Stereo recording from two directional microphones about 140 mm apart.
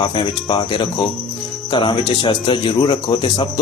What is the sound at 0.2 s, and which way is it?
Speech, 35° left (ahead or behind).